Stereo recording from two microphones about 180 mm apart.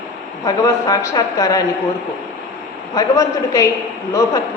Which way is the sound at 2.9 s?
20° left (ahead or behind).